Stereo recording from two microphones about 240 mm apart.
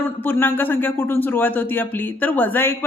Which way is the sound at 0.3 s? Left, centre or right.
Centre.